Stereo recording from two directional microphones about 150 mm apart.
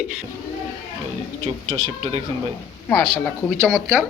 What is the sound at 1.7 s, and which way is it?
Speech, 55° right (ahead or behind).